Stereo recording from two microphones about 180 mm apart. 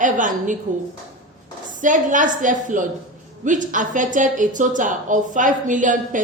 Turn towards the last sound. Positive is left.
turn(degrees=-45)  # may be behind; listen again after turning